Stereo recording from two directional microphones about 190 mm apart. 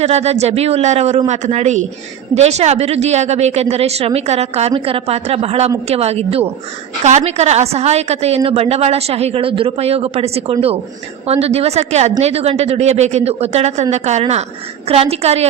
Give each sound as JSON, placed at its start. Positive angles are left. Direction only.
{"t": 0.0, "sound": "a woman's voice", "side_deg": -35}